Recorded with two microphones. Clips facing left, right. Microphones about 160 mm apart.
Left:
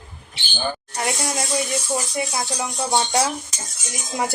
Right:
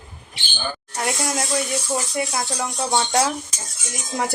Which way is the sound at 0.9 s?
Centre (ahead or behind).